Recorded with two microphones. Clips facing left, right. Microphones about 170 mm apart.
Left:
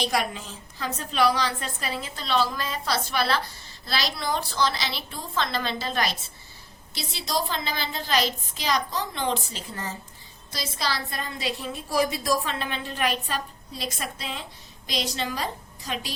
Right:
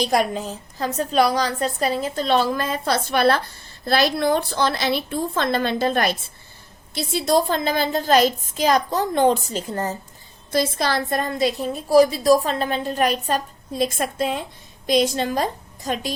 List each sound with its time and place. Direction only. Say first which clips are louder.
0.0 s a woman's voice: right 7 dB; 40° right (ahead or behind)
10.5 s a woman's voice: right 10 dB; 55° right (ahead or behind)